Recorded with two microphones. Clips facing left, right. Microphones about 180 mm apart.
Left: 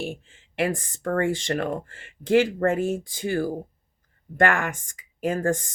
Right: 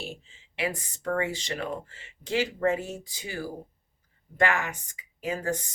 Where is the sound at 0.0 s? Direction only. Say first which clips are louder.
Left 7 dB; 55° left (ahead or behind).